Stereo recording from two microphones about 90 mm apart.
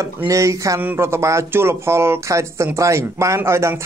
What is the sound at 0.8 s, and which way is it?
Speech, 25° right (ahead or behind).